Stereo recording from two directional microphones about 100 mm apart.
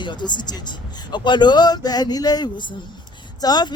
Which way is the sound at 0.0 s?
50° left (ahead or behind).